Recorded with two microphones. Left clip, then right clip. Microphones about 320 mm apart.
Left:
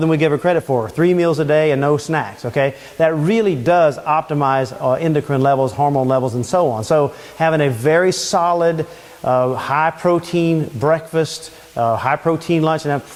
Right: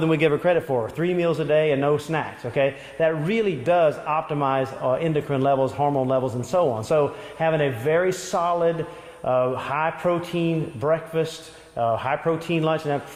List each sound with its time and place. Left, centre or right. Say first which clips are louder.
0.0 s speech: left 4 dB; left